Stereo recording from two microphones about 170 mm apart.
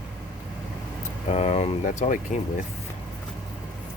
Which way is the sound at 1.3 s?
40° left (ahead or behind).